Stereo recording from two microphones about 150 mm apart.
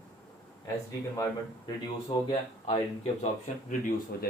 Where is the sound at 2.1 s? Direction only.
35° left (ahead or behind).